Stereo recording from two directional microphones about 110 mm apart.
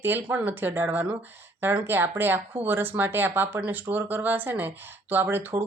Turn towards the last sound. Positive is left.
turn(degrees=-15)  # may be behind; listen again after turning